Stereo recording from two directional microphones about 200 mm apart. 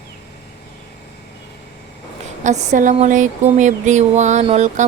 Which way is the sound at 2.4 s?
35° right (ahead or behind).